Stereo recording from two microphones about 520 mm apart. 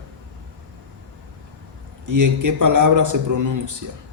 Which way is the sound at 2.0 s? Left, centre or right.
Right.